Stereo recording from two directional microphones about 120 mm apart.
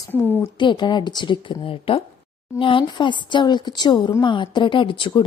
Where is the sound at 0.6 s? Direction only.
40° left (ahead or behind).